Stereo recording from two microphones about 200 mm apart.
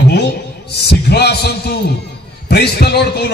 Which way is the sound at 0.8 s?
55° left (ahead or behind).